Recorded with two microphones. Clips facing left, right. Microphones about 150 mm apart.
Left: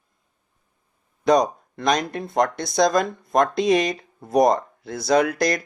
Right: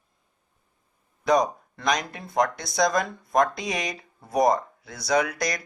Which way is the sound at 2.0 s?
55° left (ahead or behind).